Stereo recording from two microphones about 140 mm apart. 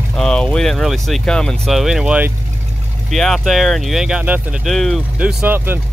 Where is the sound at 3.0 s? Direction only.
Centre (ahead or behind).